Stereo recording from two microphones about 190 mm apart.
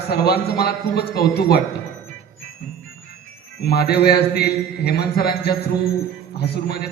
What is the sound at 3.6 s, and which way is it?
A man's voice, 55° left (ahead or behind).